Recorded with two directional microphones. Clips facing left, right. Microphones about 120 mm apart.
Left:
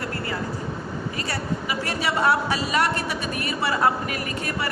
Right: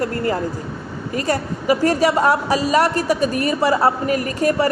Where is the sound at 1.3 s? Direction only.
40° right (ahead or behind).